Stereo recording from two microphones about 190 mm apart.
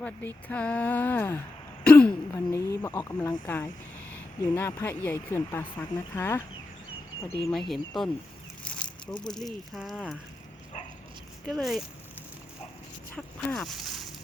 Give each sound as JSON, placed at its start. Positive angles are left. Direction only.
{"t": 0.0, "sound": "speech", "side_deg": 10}
{"t": 7.5, "sound": "speech", "side_deg": 0}
{"t": 9.2, "sound": "speech", "side_deg": 0}
{"t": 11.4, "sound": "speech", "side_deg": 0}
{"t": 13.1, "sound": "a sound", "side_deg": 5}